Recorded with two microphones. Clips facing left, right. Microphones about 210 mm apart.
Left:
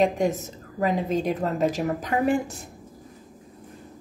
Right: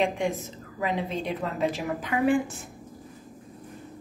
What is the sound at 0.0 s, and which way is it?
A woman's voice, 40° left (ahead or behind).